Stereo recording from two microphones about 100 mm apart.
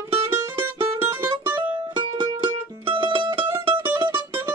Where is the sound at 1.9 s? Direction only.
45° right (ahead or behind).